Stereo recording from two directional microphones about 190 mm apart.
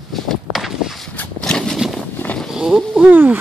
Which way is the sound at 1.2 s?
5° left (ahead or behind).